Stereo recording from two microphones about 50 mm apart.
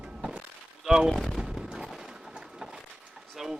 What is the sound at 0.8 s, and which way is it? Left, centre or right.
Speech, centre.